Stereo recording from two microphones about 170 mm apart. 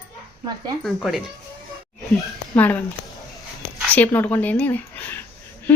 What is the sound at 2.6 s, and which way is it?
Speech, 10° left (ahead or behind).